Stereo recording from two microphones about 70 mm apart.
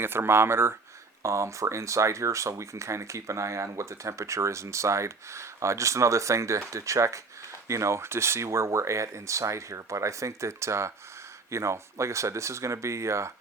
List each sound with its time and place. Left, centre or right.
0.0 s speech: right